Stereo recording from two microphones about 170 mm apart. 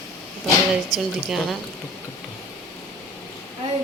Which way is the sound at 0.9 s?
Centre (ahead or behind).